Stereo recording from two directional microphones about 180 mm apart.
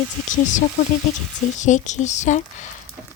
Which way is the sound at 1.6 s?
40° left (ahead or behind).